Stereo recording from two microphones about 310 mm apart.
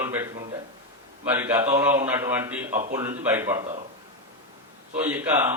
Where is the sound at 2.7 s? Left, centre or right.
Right.